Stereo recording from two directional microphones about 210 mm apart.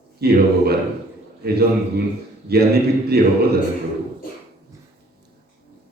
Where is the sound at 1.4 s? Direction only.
50° right (ahead or behind).